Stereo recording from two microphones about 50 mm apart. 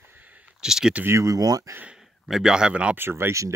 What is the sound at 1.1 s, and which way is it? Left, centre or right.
Speech, right.